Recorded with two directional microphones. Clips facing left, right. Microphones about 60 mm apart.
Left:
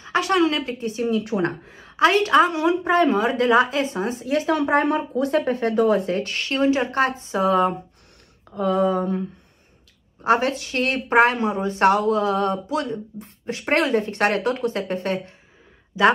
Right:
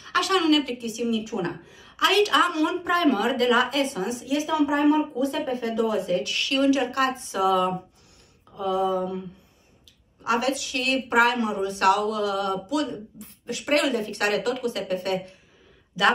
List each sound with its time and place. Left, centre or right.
0.0 s speech: left
8.5 s a sound: left
10.2 s speech: left